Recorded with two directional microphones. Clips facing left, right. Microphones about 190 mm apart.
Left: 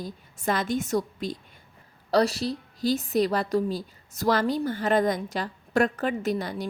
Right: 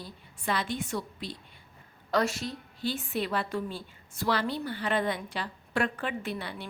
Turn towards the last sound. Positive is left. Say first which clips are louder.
# left 7 dB
turn(degrees=40)  # may be behind; listen again after turning